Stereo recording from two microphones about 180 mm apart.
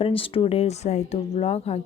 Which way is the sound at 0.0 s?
30° left (ahead or behind).